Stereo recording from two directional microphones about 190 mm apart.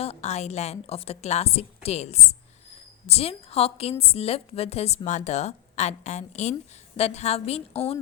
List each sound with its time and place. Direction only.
0.0 s a woman's voice: 35° left (ahead or behind)